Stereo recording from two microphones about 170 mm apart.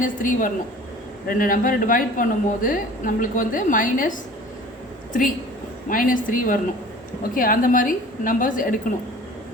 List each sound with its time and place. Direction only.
0.0 s a woman's voice: 50° left (ahead or behind)
5.9 s a woman's voice: 55° left (ahead or behind)